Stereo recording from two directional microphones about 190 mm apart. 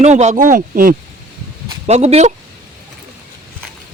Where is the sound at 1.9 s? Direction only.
35° right (ahead or behind).